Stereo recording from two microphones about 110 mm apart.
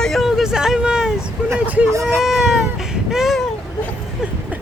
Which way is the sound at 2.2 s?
5° right (ahead or behind).